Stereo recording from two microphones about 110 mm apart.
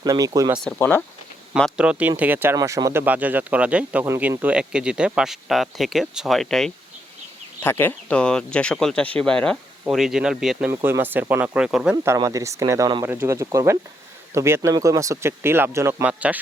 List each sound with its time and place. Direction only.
0.0 s speech: 30° right (ahead or behind)
0.8 s speech: 20° left (ahead or behind)
1.7 s speech: 10° right (ahead or behind)
2.6 s speech: 30° right (ahead or behind)
3.0 s speech: 15° right (ahead or behind); by 6.7 s 5° left (ahead or behind)
7.6 s speech: 20° left (ahead or behind)
9.9 s speech: 5° right (ahead or behind)
10.8 s speech: 20° right (ahead or behind)
12.0 s speech: 30° right (ahead or behind)
16.0 s speech: 10° right (ahead or behind)